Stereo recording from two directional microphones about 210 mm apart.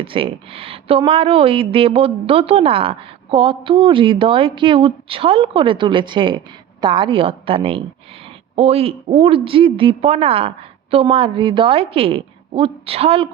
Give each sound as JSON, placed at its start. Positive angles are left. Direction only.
{"t": 0.0, "sound": "speech", "side_deg": -25}